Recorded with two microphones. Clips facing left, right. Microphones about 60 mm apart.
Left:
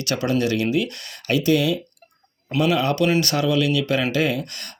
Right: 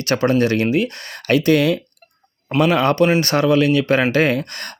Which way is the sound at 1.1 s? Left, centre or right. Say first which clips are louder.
Right 4 dB; right.